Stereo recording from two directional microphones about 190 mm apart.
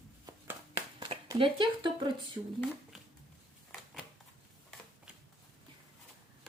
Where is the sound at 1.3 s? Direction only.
25° right (ahead or behind).